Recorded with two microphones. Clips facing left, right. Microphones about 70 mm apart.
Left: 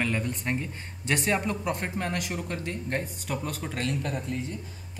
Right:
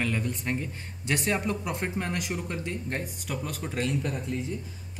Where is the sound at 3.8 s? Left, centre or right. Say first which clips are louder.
Right 2 dB; centre.